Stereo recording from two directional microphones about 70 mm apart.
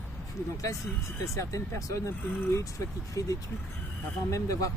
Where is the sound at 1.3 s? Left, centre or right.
Left.